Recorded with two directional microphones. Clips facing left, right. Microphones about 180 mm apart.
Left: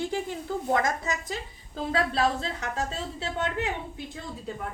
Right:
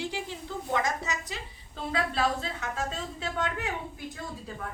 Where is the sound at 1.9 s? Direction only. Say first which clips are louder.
Left 2 dB; 35° left (ahead or behind).